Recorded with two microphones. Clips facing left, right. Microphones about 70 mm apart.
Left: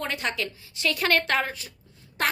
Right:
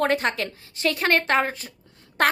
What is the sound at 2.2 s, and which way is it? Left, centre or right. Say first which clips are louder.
Speech: right 6 dB; right.